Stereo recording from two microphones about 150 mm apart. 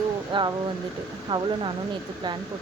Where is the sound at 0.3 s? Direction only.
35° right (ahead or behind).